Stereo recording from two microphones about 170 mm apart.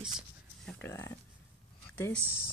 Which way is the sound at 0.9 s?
15° left (ahead or behind).